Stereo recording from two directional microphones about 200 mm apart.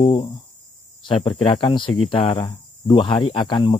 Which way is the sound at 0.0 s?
25° left (ahead or behind).